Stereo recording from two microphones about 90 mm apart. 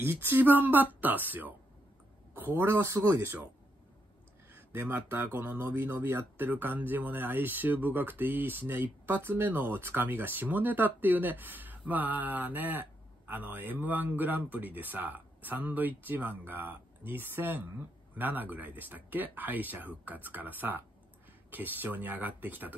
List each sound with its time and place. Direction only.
0.0 s speech: 25° right (ahead or behind)
4.5 s speech: 25° right (ahead or behind)